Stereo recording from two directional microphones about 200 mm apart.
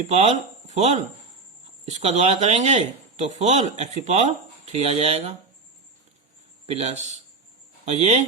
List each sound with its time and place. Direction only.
0.0 s speech: 30° right (ahead or behind)
6.7 s speech: 30° right (ahead or behind)